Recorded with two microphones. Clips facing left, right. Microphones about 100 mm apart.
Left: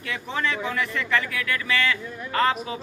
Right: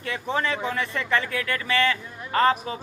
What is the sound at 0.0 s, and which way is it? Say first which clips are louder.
Speech: right 2 dB; 35° right (ahead or behind).